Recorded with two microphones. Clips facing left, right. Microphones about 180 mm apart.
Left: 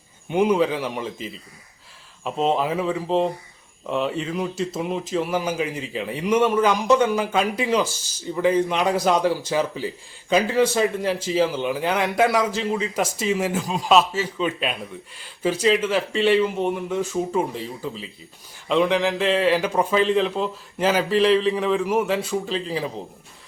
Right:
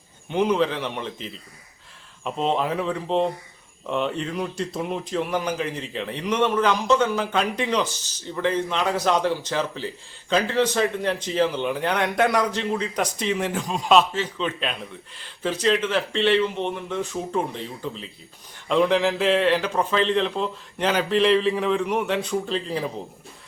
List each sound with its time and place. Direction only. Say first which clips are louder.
0.3 s a man's voice: left 2 dB; 10° left (ahead or behind)